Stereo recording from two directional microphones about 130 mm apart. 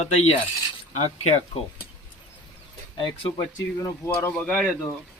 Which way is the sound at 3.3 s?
25° left (ahead or behind).